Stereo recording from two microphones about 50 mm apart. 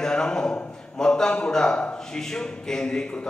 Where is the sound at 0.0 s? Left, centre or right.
Centre.